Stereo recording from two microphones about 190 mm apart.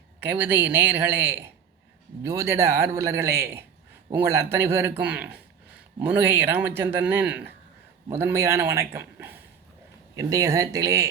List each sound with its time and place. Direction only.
0.2 s speech: 10° right (ahead or behind)